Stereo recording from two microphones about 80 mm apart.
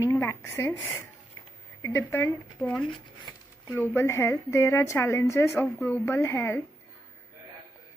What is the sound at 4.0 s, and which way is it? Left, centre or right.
A woman's voice, left.